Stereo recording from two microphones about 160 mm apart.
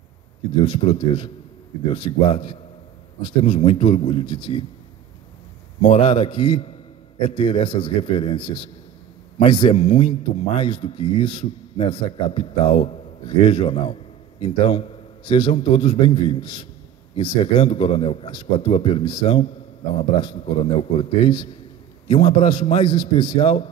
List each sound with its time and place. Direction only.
0.7 s speech: 35° left (ahead or behind)
5.8 s speech: 35° left (ahead or behind)